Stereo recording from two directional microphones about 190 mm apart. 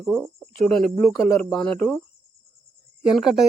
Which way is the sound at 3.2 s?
Centre (ahead or behind).